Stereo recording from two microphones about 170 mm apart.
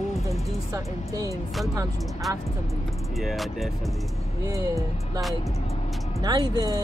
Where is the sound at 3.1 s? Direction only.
Centre (ahead or behind).